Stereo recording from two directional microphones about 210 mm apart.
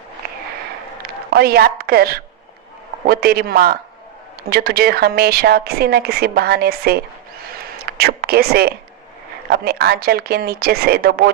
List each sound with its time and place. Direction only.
1.3 s a woman's voice: 45° right (ahead or behind)